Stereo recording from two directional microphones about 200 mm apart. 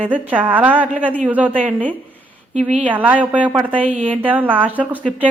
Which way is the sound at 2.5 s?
35° right (ahead or behind).